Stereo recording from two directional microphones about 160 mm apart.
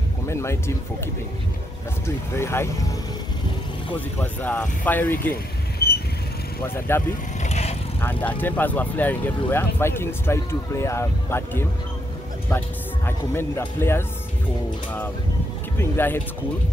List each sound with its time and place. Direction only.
0.3 s speech: 15° left (ahead or behind)
2.0 s speech: 15° left (ahead or behind)
3.9 s speech: 10° left (ahead or behind)
5.8 s vehicle: 75° left (ahead or behind)
6.6 s speech: 15° left (ahead or behind)
7.4 s vehicle: 45° left (ahead or behind)
8.0 s speech: 10° left (ahead or behind)
15.8 s speech: 15° left (ahead or behind)